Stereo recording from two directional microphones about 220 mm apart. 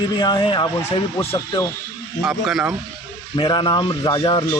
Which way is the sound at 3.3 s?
20° left (ahead or behind).